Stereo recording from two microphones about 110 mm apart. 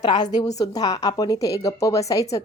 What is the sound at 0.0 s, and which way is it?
A woman's voice, 40° left (ahead or behind).